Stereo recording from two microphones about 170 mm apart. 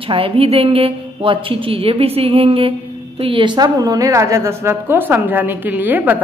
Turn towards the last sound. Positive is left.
turn(degrees=-10)  # may be behind; listen again after turning